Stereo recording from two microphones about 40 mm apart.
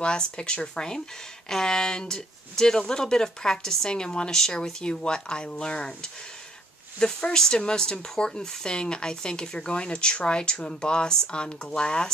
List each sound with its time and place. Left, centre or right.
0.0 s speech: left
7.0 s speech: centre